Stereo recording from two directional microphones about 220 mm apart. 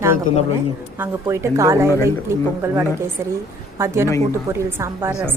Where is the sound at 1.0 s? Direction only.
10° right (ahead or behind).